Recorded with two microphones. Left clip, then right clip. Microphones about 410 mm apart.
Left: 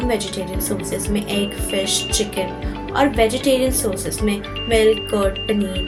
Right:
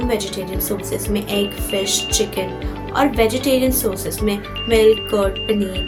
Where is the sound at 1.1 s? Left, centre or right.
Right.